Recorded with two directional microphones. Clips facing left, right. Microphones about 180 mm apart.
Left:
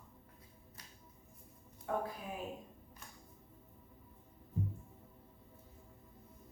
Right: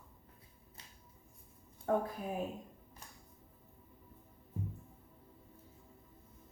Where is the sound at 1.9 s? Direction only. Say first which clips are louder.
Right 5 dB; 40° right (ahead or behind).